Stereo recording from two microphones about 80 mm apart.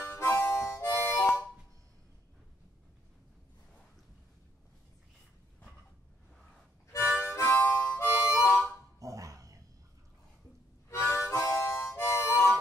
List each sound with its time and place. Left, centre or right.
0.0 s harmonica: left
7.2 s harmonica: left
8.3 s harmonica: left
9.0 s a sound: right
10.9 s harmonica: left